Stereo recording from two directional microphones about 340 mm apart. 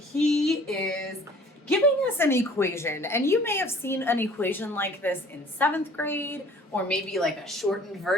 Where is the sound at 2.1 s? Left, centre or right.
Centre.